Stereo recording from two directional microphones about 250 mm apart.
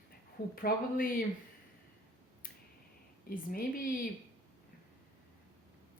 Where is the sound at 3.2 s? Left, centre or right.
Left.